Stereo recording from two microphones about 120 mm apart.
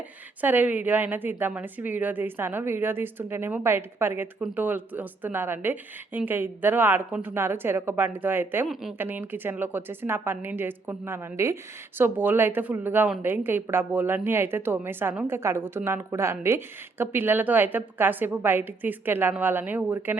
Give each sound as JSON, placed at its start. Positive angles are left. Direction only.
{"t": 0.4, "sound": "a woman's voice", "side_deg": -15}
{"t": 8.6, "sound": "speech", "side_deg": 0}
{"t": 9.0, "sound": "a woman's voice", "side_deg": -15}